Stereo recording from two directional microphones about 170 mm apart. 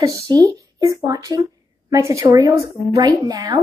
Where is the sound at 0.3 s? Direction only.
20° right (ahead or behind).